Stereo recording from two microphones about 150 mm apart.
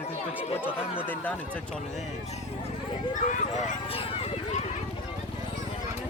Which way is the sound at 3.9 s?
40° left (ahead or behind).